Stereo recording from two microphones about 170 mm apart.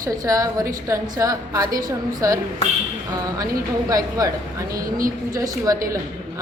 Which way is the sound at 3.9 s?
20° right (ahead or behind).